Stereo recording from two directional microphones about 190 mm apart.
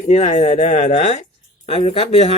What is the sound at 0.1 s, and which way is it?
Speech, 35° left (ahead or behind).